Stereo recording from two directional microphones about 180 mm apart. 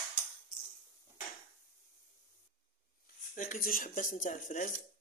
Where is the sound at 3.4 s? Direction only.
50° left (ahead or behind).